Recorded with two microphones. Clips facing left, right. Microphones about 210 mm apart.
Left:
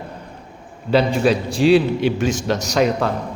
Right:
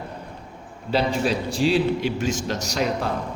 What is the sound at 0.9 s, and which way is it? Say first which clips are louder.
A man's voice: left 6 dB; 65° left (ahead or behind).